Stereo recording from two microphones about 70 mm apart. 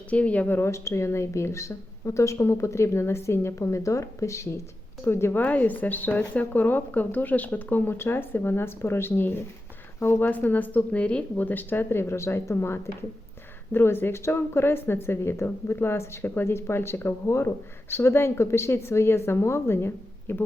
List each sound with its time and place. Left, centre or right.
0.1 s speech: centre
0.7 s a woman's voice: left